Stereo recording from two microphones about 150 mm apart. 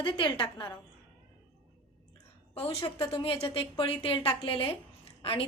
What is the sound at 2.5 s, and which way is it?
A woman's voice, 40° left (ahead or behind).